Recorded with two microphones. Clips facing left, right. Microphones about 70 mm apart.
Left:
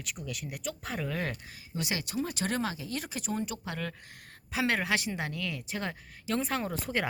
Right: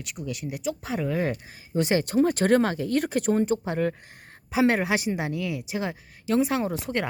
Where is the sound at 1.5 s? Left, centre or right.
Right.